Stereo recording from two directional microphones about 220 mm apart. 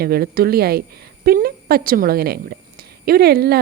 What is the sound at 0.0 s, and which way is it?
A woman's voice, 45° right (ahead or behind).